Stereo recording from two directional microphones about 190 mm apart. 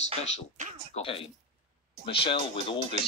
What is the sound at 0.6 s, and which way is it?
Speech, 40° right (ahead or behind).